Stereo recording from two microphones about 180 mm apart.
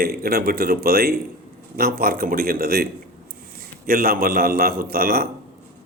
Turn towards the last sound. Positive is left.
turn(degrees=-55)  # may be behind; listen again after turning